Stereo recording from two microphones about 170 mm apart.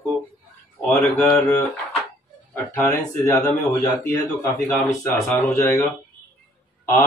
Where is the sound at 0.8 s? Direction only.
15° left (ahead or behind).